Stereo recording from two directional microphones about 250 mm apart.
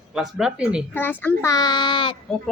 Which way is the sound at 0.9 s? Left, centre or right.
Centre.